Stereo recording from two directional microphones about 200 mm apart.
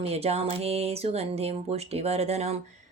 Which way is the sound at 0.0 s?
30° right (ahead or behind).